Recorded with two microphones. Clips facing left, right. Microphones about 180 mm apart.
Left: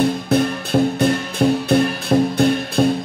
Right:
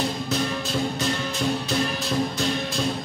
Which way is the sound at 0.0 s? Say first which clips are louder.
Left 9 dB; 55° left (ahead or behind).